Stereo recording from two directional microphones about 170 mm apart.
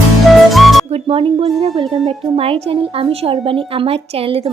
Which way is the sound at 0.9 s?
35° right (ahead or behind).